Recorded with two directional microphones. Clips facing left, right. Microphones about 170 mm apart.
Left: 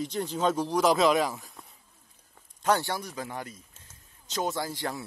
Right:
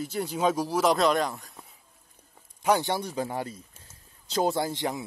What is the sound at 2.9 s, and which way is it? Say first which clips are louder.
Speech: right 5 dB; 30° right (ahead or behind).